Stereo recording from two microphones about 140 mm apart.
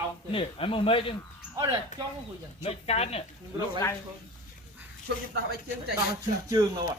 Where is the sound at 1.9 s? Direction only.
60° left (ahead or behind).